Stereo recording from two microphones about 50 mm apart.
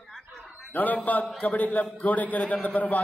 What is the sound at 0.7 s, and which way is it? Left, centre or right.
A man's voice, left.